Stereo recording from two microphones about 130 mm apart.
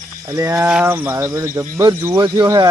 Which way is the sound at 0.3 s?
20° right (ahead or behind).